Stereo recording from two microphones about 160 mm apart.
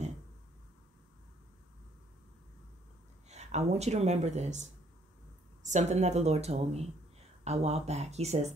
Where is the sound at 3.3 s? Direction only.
45° right (ahead or behind).